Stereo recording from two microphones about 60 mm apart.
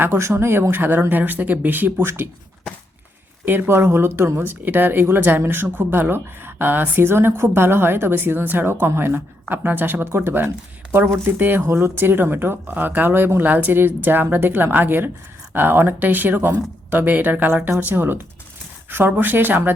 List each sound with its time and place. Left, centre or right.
0.0 s a woman's voice: right
3.4 s a woman's voice: right
11.3 s a woman's voice: right
11.6 s a woman's voice: right